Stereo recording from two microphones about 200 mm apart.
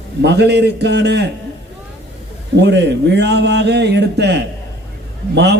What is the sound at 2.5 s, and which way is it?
A man's voice, 60° right (ahead or behind).